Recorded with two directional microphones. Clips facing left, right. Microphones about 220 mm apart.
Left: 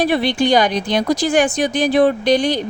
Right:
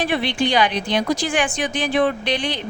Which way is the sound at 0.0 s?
40° left (ahead or behind).